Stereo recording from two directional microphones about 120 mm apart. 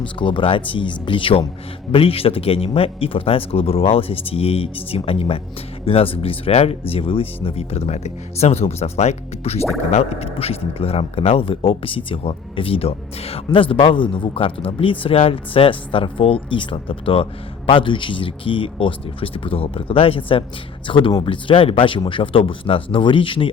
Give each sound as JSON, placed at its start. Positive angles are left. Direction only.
{"t": 0.2, "sound": "speech", "side_deg": 45}